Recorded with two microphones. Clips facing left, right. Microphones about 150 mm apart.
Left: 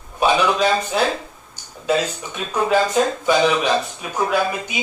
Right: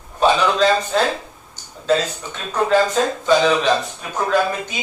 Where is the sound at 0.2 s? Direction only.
10° left (ahead or behind).